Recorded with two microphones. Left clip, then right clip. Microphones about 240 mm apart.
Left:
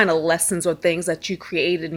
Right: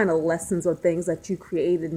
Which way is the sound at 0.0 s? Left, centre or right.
Left.